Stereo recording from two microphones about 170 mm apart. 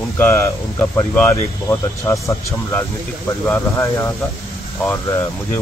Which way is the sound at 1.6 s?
20° left (ahead or behind).